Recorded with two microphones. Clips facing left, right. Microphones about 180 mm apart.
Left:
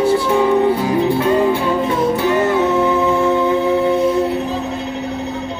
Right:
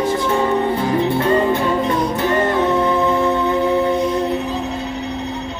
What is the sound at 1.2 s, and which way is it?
Music, 10° left (ahead or behind).